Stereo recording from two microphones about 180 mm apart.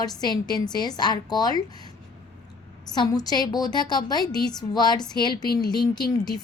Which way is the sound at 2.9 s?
20° left (ahead or behind).